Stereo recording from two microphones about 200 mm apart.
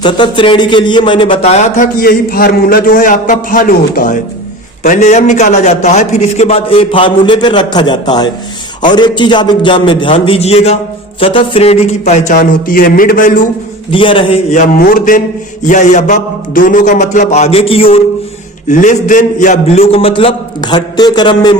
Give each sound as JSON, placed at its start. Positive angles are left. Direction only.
{"t": 0.0, "sound": "a man's voice", "side_deg": 25}
{"t": 13.9, "sound": "speech", "side_deg": 25}
{"t": 18.7, "sound": "a man's voice", "side_deg": 40}